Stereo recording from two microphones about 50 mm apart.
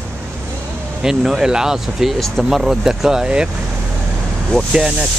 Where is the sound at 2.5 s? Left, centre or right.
Centre.